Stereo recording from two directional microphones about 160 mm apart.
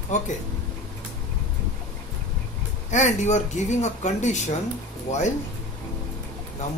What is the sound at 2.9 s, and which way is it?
Speech, 45° left (ahead or behind).